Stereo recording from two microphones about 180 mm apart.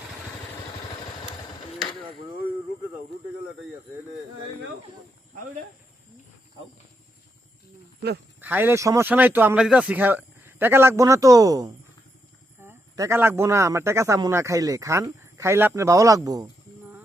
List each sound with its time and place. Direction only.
8.4 s speech: 10° right (ahead or behind)